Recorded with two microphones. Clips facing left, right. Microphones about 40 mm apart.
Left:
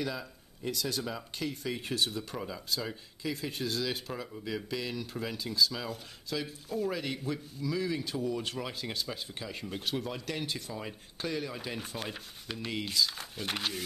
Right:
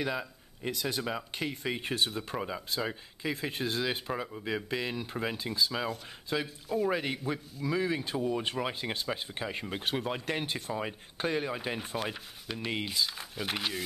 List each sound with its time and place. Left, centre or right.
0.0 s speech: right
6.4 s speech: centre
6.9 s speech: right
12.0 s speech: centre
12.5 s speech: right
13.1 s speech: centre